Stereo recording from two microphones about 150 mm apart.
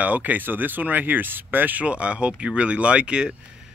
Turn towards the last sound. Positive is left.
turn(degrees=-5)  # may be behind; listen again after turning